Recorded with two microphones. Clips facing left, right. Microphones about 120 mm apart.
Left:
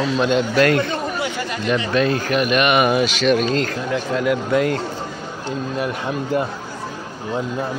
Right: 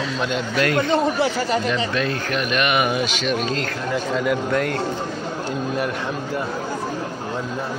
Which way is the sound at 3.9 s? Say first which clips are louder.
Left 1 dB; centre (ahead or behind).